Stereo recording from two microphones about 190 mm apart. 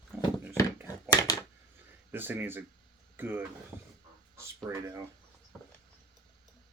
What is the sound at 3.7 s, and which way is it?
Fowl, 10° right (ahead or behind).